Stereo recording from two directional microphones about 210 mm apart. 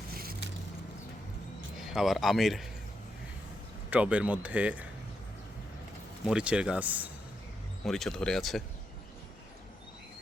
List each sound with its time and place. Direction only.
0.1 s vehicle: 45° right (ahead or behind)
1.8 s speech: centre (ahead or behind)
3.8 s speech: 5° right (ahead or behind)
6.2 s speech: 5° right (ahead or behind)